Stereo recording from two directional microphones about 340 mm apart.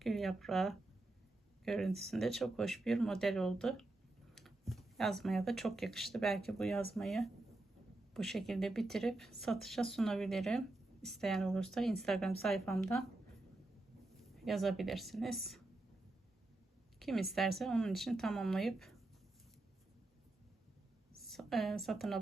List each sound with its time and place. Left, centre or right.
0.0 s speech: centre
14.2 s speech: centre
17.0 s speech: centre
21.2 s a woman's voice: centre